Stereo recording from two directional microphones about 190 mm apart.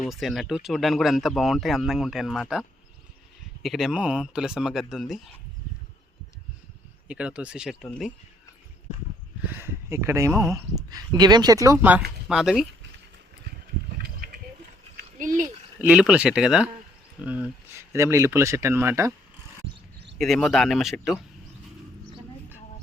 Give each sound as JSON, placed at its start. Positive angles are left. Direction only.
{"t": 0.0, "sound": "speech", "side_deg": 0}
{"t": 7.1, "sound": "speech", "side_deg": -5}
{"t": 9.4, "sound": "speech", "side_deg": -10}
{"t": 14.0, "sound": "a sound", "side_deg": -50}
{"t": 15.4, "sound": "speech", "side_deg": -10}
{"t": 20.1, "sound": "speech", "side_deg": 0}